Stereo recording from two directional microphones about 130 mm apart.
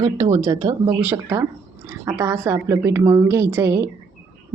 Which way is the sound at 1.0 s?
15° right (ahead or behind).